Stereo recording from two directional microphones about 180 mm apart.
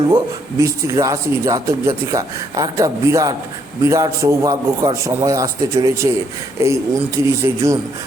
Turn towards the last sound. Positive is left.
turn(degrees=-15)  # may be behind; listen again after turning